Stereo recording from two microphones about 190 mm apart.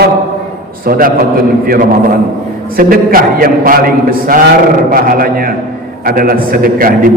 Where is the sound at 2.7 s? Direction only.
50° right (ahead or behind).